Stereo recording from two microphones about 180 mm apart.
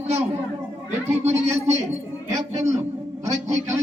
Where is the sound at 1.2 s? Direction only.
40° right (ahead or behind).